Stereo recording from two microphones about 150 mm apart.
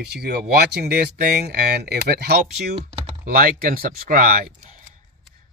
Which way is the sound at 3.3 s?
75° right (ahead or behind).